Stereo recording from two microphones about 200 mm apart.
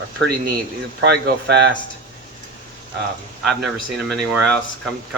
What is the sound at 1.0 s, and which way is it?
Speech, 55° right (ahead or behind).